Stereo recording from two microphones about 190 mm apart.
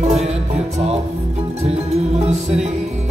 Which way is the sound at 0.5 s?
35° right (ahead or behind).